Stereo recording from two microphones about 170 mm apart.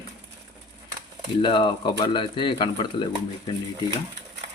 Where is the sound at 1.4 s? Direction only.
30° left (ahead or behind).